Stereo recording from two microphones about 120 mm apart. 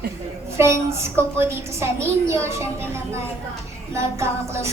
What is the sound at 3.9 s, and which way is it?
Speech, 25° right (ahead or behind).